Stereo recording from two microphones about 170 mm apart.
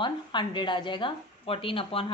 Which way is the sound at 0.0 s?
30° left (ahead or behind).